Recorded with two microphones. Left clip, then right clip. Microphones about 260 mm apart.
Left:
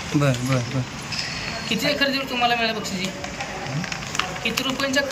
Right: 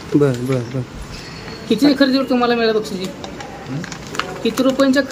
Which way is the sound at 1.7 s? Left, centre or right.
Right.